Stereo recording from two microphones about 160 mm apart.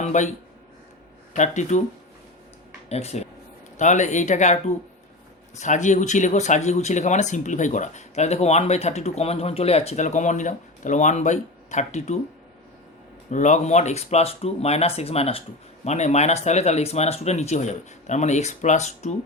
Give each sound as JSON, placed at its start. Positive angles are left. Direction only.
{"t": 0.0, "sound": "speech", "side_deg": 50}
{"t": 2.9, "sound": "speech", "side_deg": 40}
{"t": 13.3, "sound": "speech", "side_deg": 50}